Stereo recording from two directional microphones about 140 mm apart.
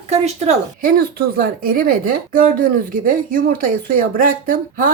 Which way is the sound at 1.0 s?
90° right.